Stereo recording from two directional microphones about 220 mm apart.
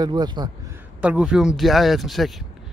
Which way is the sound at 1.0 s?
5° right (ahead or behind).